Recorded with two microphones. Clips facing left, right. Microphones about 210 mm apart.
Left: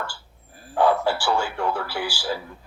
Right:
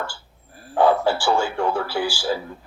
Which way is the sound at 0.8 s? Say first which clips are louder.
Right 2 dB; 25° right (ahead or behind).